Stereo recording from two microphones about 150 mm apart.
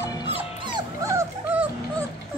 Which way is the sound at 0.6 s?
25° right (ahead or behind).